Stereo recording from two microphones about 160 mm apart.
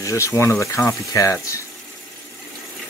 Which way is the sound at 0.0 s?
20° left (ahead or behind).